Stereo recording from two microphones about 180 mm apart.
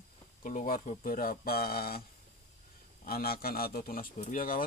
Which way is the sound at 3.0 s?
55° left (ahead or behind).